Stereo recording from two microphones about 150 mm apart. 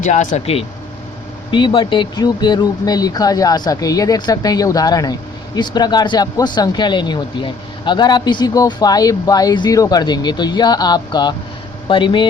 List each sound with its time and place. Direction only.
0.0 s speech: 55° left (ahead or behind)
1.5 s speech: 35° left (ahead or behind)